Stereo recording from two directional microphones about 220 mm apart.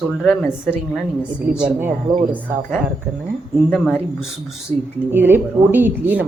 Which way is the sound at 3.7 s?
5° left (ahead or behind).